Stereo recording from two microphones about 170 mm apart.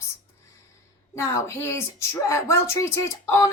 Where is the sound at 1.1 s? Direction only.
15° left (ahead or behind).